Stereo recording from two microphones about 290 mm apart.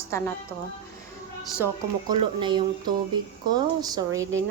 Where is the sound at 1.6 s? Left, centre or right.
Centre.